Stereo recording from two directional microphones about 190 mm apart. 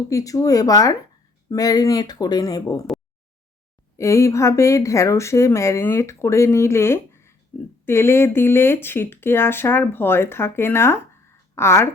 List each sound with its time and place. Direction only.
0.1 s speech: 15° left (ahead or behind)
3.9 s speech: 15° left (ahead or behind)